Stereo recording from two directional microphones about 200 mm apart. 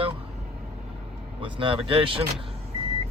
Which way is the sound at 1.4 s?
25° right (ahead or behind).